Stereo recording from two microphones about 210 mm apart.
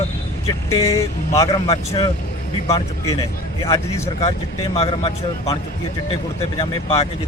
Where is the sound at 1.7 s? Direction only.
25° left (ahead or behind).